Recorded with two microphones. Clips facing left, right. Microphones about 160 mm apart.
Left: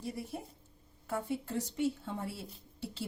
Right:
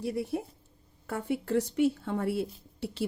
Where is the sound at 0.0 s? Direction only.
70° right (ahead or behind).